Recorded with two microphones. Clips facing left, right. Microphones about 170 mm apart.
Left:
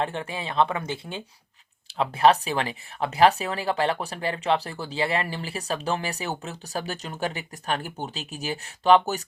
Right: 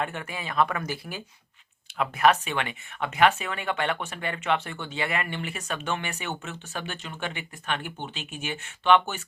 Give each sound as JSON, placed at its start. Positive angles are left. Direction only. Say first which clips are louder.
{"t": 0.0, "sound": "speech", "louder": "left 3 dB", "side_deg": 30}